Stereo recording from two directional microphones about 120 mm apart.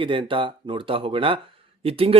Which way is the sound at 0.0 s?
45° right (ahead or behind).